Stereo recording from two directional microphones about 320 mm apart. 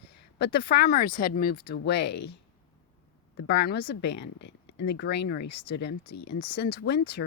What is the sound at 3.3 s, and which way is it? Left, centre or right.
Speech, left.